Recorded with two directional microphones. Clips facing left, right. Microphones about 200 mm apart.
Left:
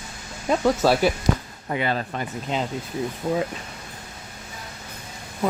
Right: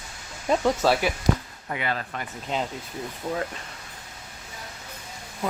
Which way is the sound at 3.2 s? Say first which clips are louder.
Left 5 dB; 15° left (ahead or behind).